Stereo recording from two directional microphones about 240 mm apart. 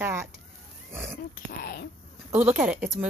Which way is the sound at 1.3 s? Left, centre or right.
Left.